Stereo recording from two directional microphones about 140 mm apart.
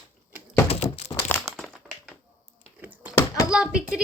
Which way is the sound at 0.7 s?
50° left (ahead or behind).